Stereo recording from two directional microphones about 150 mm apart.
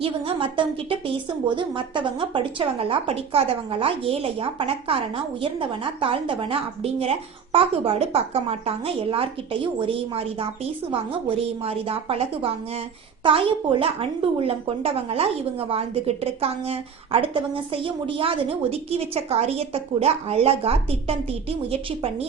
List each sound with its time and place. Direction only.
0.0 s a woman's voice: 35° right (ahead or behind)